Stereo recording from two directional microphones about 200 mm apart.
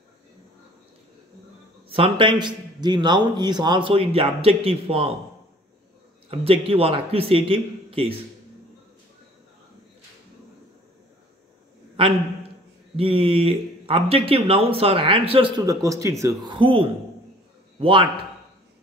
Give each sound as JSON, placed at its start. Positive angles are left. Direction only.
{"t": 1.9, "sound": "speech", "side_deg": -25}
{"t": 6.3, "sound": "speech", "side_deg": -30}
{"t": 12.9, "sound": "a man's voice", "side_deg": -25}